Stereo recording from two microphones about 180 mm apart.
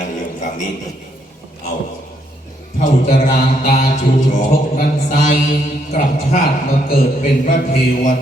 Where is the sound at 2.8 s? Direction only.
50° left (ahead or behind).